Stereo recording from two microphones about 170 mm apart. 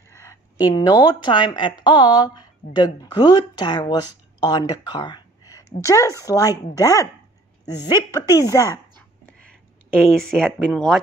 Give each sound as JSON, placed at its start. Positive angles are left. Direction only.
{"t": 0.1, "sound": "a sound", "side_deg": 15}
{"t": 1.2, "sound": "a woman's voice", "side_deg": 25}
{"t": 9.2, "sound": "whispering", "side_deg": 5}
{"t": 10.2, "sound": "speech", "side_deg": 5}